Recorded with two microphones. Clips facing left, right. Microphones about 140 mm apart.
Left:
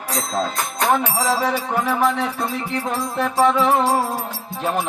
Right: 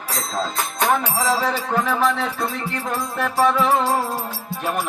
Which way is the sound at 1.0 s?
15° left (ahead or behind).